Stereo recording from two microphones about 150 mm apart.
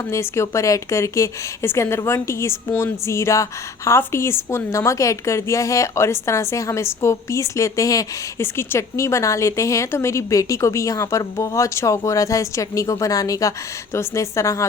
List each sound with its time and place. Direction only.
0.0 s speech: 20° left (ahead or behind)